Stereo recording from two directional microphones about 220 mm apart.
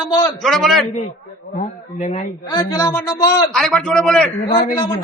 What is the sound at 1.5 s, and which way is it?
Speech, 30° left (ahead or behind).